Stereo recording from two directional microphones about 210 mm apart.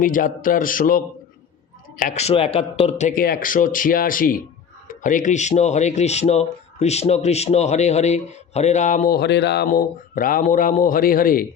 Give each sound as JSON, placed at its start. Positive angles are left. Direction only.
{"t": 0.0, "sound": "speech", "side_deg": 40}
{"t": 9.6, "sound": "speech", "side_deg": 40}